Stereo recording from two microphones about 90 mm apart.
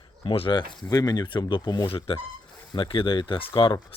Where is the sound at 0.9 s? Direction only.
45° left (ahead or behind).